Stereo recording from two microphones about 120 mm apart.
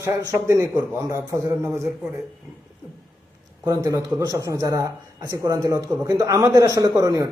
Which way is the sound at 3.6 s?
25° right (ahead or behind).